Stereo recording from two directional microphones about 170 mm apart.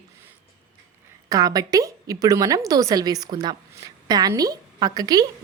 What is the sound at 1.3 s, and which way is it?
A woman's voice, 20° right (ahead or behind).